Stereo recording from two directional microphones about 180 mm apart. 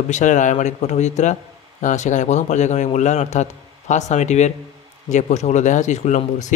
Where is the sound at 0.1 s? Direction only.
45° left (ahead or behind).